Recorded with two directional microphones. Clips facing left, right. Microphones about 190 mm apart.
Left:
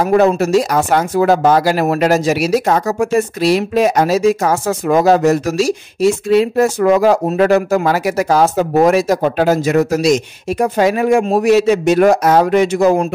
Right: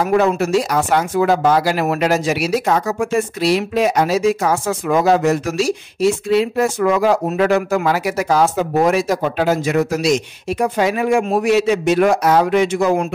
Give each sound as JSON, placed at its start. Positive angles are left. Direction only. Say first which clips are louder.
{"t": 0.0, "sound": "speech", "louder": "left 4 dB", "side_deg": 40}